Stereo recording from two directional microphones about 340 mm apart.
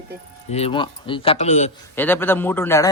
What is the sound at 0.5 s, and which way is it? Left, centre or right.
A man's voice, centre.